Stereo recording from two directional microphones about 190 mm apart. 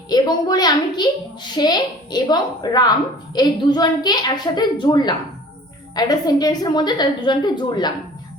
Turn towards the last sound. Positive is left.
turn(degrees=20)  # may be behind; listen again after turning